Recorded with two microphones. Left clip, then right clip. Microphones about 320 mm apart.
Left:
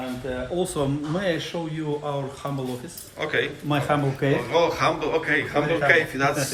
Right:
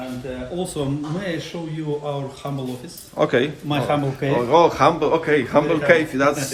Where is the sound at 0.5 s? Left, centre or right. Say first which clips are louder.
Even; centre.